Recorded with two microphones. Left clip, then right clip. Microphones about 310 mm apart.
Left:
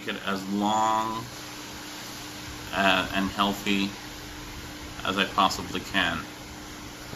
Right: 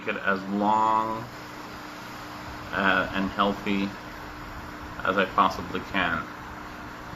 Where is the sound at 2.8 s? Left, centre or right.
Centre.